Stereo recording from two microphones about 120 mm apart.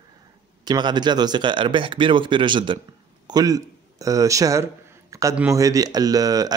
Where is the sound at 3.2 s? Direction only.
30° right (ahead or behind).